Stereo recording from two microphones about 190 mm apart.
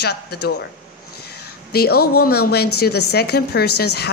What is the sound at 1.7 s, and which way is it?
A woman's voice, 55° left (ahead or behind).